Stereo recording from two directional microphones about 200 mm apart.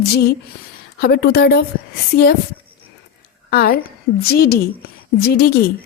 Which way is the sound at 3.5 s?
50° left (ahead or behind).